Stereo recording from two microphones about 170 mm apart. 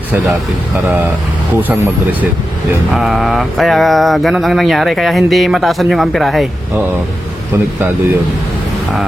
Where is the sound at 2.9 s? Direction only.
Centre (ahead or behind).